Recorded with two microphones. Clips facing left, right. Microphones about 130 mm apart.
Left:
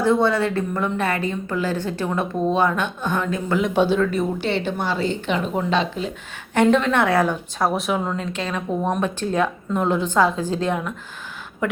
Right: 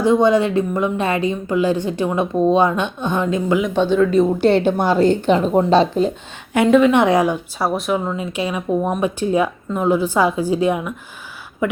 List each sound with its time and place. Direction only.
0.0 s a woman's voice: 15° right (ahead or behind)
3.7 s speech: 5° left (ahead or behind)
4.4 s a woman's voice: 45° right (ahead or behind)
6.5 s a woman's voice: 10° right (ahead or behind)
7.7 s a woman's voice: centre (ahead or behind)